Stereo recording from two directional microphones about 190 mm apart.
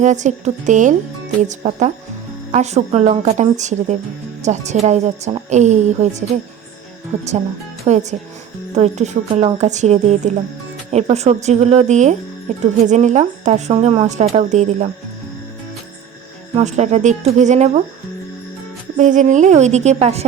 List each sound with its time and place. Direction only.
0.0 s speech: 40° right (ahead or behind)
7.9 s speech: 40° right (ahead or behind)
16.6 s speech: 40° right (ahead or behind)
18.9 s speech: 40° right (ahead or behind)